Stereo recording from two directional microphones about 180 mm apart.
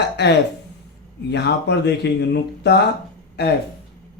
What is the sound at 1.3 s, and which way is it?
Speech, 70° left (ahead or behind).